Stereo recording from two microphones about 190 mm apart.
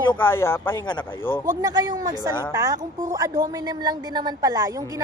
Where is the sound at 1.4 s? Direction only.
20° right (ahead or behind).